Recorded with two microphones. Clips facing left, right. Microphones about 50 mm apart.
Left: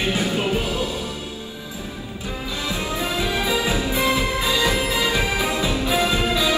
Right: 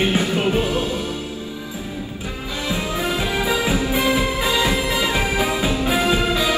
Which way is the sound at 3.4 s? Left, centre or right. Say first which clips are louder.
Right 2 dB; right.